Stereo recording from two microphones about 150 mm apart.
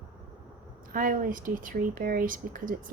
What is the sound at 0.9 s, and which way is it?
Speech, 65° right (ahead or behind).